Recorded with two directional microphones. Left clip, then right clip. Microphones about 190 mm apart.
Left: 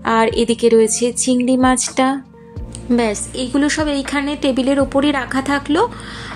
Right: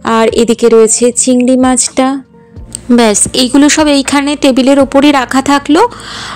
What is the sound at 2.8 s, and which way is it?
A woman's voice, 45° right (ahead or behind).